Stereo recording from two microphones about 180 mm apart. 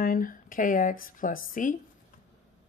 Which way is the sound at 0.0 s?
55° left (ahead or behind).